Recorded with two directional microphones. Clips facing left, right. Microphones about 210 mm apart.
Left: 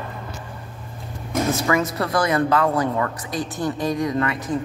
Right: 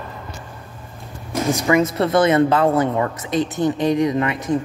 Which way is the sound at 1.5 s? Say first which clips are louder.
Right 6 dB; 20° right (ahead or behind).